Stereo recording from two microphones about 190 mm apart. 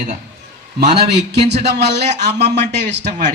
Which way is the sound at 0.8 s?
60° right (ahead or behind).